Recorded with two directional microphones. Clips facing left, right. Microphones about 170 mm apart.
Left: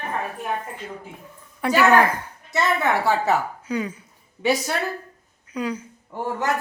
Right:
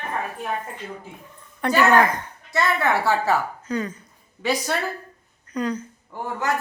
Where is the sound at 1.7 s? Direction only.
10° left (ahead or behind).